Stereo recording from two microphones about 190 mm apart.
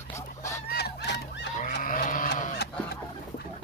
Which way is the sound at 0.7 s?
60° left (ahead or behind).